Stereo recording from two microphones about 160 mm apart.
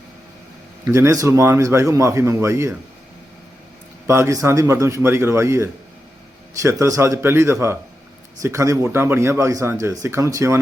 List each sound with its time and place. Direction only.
0.9 s a man's voice: 20° right (ahead or behind)
4.0 s a man's voice: 15° right (ahead or behind)